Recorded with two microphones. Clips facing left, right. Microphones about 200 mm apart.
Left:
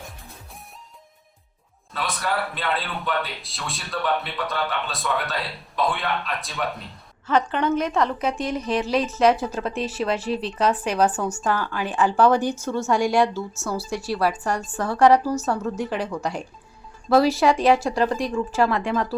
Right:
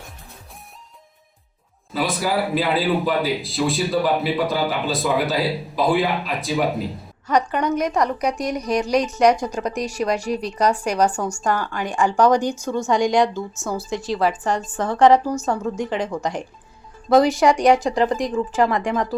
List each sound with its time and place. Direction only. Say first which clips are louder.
1.9 s a man's voice: right 5 dB; centre (ahead or behind)
7.3 s speech: right 1 dB; 15° right (ahead or behind)
8.7 s a man's voice: right 3 dB; centre (ahead or behind)
9.1 s speech: right 1 dB; 15° right (ahead or behind)